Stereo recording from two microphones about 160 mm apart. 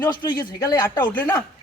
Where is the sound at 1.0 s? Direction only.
10° left (ahead or behind).